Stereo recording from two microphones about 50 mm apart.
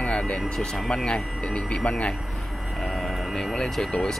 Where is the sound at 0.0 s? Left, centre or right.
Left.